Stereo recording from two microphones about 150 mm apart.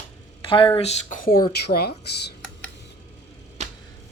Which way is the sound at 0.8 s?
45° left (ahead or behind).